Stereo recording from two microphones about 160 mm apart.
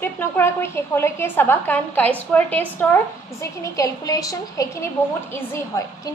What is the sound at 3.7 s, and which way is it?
A woman's voice, 20° left (ahead or behind).